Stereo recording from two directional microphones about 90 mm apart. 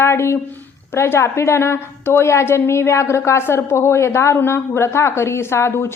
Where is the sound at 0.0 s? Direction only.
30° left (ahead or behind).